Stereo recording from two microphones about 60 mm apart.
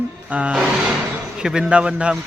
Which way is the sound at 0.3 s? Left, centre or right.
Right.